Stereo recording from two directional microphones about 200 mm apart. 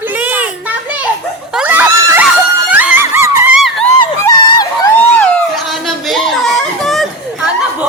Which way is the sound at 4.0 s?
20° left (ahead or behind).